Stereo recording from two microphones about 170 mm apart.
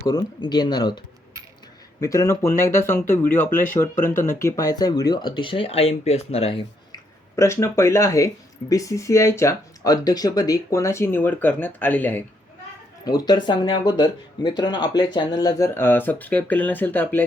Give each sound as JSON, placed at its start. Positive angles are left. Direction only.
{"t": 0.0, "sound": "speech", "side_deg": 25}
{"t": 7.3, "sound": "speech", "side_deg": 15}
{"t": 13.1, "sound": "speech", "side_deg": 25}